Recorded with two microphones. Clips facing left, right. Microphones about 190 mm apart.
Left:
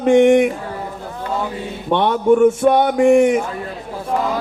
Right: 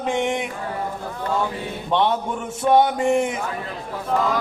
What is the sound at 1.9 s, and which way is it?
A man's voice, 60° left (ahead or behind).